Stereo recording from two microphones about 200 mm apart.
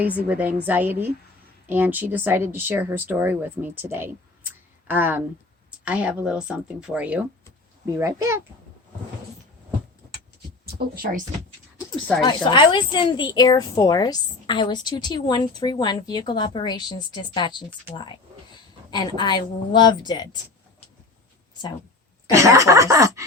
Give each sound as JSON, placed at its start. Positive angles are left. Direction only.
{"t": 0.0, "sound": "speech", "side_deg": -5}
{"t": 10.9, "sound": "speech", "side_deg": -45}
{"t": 12.2, "sound": "speech", "side_deg": 20}
{"t": 22.3, "sound": "speech", "side_deg": -15}